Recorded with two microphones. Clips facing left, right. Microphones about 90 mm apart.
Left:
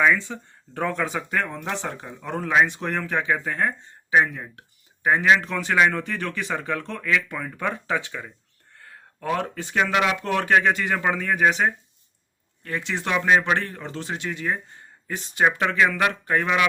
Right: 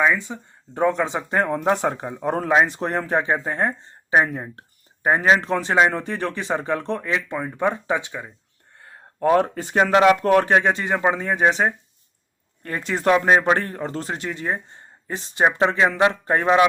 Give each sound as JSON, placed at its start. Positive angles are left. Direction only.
{"t": 0.0, "sound": "speech", "side_deg": -20}
{"t": 9.2, "sound": "speech", "side_deg": -40}
{"t": 12.6, "sound": "speech", "side_deg": -45}